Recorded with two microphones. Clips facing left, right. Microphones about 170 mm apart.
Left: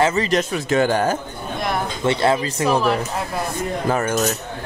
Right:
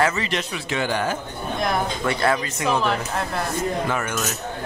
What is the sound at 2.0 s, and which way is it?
Speech, 25° left (ahead or behind).